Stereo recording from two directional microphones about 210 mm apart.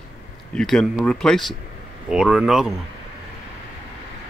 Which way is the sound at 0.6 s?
5° left (ahead or behind).